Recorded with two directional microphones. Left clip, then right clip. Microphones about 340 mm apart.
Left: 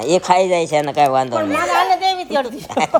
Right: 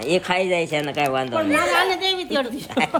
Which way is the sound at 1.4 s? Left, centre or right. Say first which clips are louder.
Left 3 dB; left.